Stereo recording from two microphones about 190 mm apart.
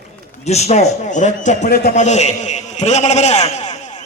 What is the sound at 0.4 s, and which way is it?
A man's voice, 35° left (ahead or behind).